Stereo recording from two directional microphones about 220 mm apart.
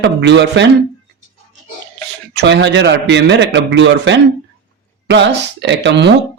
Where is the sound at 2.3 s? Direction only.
50° right (ahead or behind).